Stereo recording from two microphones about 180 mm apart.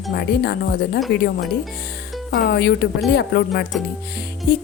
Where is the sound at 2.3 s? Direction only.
60° left (ahead or behind).